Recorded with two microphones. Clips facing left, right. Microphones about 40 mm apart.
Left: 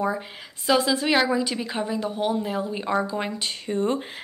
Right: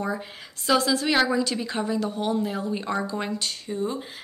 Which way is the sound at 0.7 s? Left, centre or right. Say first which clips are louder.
Left 1 dB; centre.